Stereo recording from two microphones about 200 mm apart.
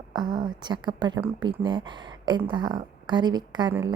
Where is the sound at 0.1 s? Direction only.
20° right (ahead or behind).